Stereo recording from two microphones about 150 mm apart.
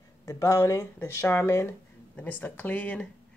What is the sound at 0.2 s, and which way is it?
Speech, 20° left (ahead or behind).